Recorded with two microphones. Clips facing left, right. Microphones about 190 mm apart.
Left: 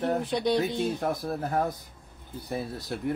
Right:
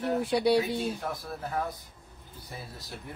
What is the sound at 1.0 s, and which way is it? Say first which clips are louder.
Speech: left 6 dB; 45° left (ahead or behind).